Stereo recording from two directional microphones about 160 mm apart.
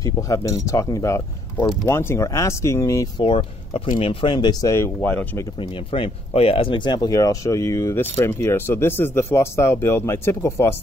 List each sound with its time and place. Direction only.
0.0 s speech: 20° left (ahead or behind)
3.3 s speech: 30° left (ahead or behind); by 5.5 s 10° left (ahead or behind)
5.6 s speech: 30° left (ahead or behind); by 10.8 s 15° left (ahead or behind)